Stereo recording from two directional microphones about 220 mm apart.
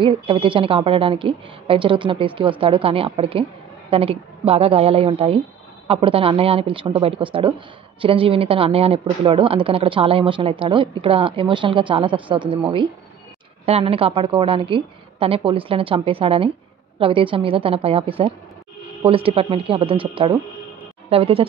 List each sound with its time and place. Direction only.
0.0 s speech: 25° right (ahead or behind)